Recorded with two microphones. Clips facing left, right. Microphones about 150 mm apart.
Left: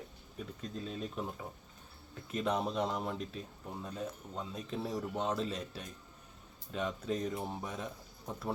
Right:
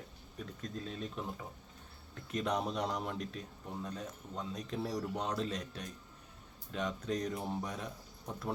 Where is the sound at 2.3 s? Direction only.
Centre (ahead or behind).